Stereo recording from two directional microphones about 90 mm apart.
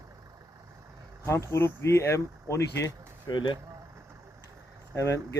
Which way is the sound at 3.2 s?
60° left (ahead or behind).